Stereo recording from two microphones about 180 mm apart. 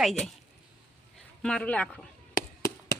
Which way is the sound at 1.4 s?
5° left (ahead or behind).